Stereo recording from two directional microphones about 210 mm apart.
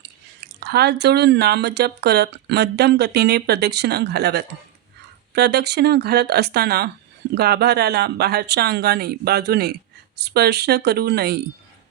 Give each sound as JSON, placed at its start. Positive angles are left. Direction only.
{"t": 0.6, "sound": "speech", "side_deg": -50}